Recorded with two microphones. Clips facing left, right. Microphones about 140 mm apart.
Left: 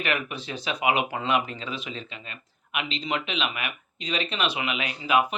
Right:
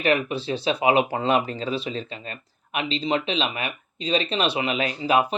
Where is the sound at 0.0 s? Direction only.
30° right (ahead or behind).